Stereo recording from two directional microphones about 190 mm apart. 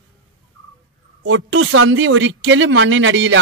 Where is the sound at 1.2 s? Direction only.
90° right.